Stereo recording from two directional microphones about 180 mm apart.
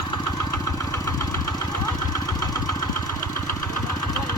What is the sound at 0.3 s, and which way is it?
Engine, 20° left (ahead or behind).